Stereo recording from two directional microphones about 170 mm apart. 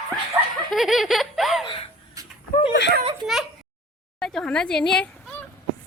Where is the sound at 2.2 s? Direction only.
20° right (ahead or behind).